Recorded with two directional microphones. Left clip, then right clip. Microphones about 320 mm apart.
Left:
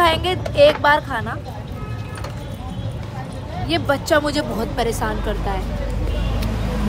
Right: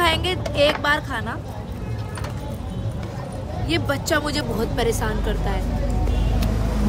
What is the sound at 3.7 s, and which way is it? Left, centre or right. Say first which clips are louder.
A woman's voice: left 4 dB; centre.